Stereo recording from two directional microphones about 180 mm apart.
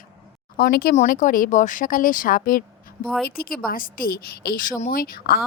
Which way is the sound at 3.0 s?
Centre (ahead or behind).